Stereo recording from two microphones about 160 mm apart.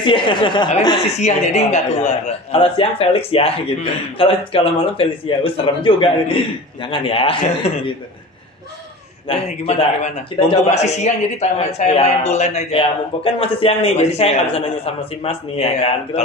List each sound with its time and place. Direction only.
0.0 s a man's voice: 30° left (ahead or behind)
1.2 s a man's voice: 45° left (ahead or behind)
9.3 s a man's voice: 40° left (ahead or behind)